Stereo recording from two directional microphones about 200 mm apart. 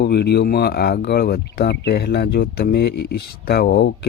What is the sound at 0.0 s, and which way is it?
Speech, 55° left (ahead or behind).